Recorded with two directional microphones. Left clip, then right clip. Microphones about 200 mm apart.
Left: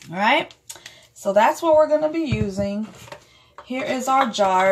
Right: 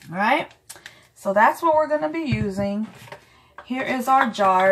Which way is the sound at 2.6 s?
25° left (ahead or behind).